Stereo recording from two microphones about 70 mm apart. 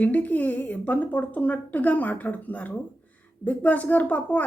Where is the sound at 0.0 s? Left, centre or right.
Left.